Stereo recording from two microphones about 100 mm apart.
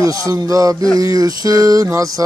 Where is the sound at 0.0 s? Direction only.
35° right (ahead or behind).